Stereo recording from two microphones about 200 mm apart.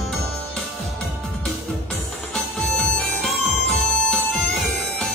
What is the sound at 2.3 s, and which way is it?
Music, centre (ahead or behind).